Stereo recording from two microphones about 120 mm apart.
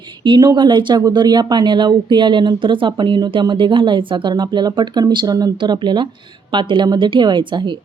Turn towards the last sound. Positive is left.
turn(degrees=-40)  # may be behind; listen again after turning